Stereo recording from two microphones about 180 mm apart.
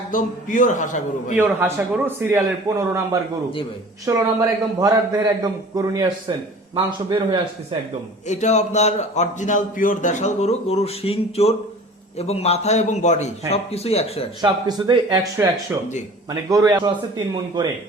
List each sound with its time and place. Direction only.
0.1 s a man's voice: 45° left (ahead or behind)
1.4 s a man's voice: 10° right (ahead or behind)
8.3 s a man's voice: 40° left (ahead or behind)
14.4 s a man's voice: 25° right (ahead or behind)